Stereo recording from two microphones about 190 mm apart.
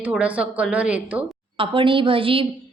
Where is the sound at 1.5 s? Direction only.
30° right (ahead or behind).